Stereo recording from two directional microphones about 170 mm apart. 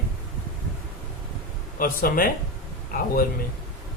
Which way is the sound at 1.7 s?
60° left (ahead or behind).